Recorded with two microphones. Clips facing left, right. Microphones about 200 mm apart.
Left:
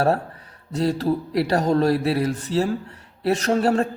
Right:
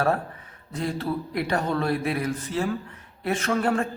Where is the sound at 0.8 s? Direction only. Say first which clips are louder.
Left 6 dB; 35° left (ahead or behind).